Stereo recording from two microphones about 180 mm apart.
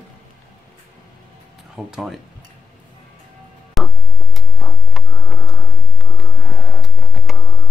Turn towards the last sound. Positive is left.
turn(degrees=0)  # may be behind; listen again after turning